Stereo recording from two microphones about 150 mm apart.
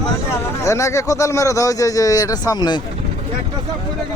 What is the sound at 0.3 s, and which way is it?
Speech, 20° left (ahead or behind).